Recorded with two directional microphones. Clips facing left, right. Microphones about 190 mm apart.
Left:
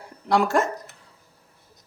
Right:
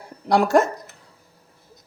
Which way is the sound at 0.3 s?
40° right (ahead or behind).